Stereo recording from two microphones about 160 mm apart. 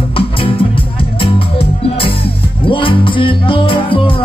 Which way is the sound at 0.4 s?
35° left (ahead or behind).